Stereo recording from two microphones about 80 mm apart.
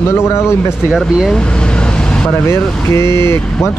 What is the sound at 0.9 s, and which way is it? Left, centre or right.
Speech, centre.